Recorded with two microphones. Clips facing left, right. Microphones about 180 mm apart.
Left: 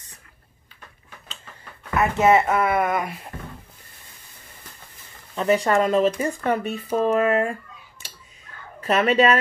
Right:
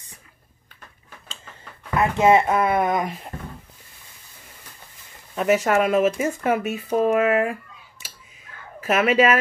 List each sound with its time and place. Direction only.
2.1 s speech: 15° right (ahead or behind)
5.3 s speech: 10° right (ahead or behind)
8.8 s speech: 5° right (ahead or behind)